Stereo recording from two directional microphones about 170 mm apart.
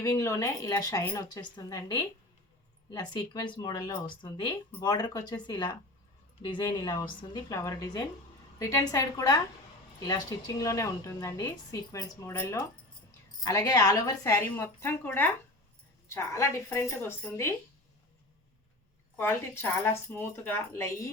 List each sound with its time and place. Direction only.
0.0 s a woman's voice: 15° left (ahead or behind)
19.1 s a woman's voice: 15° left (ahead or behind)